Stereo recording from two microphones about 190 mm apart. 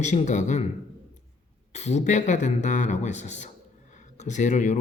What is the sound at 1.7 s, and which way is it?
Speech, 35° left (ahead or behind).